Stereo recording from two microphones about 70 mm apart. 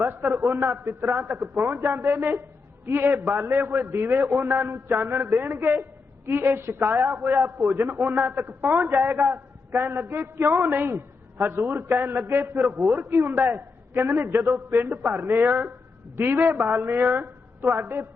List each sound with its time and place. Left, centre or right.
0.0 s a man's voice: right